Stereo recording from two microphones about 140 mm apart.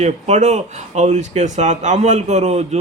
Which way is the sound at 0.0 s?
55° right (ahead or behind).